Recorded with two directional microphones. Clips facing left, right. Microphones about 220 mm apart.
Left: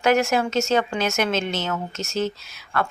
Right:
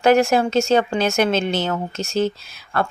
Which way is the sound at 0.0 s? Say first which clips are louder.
Right 4 dB; 30° right (ahead or behind).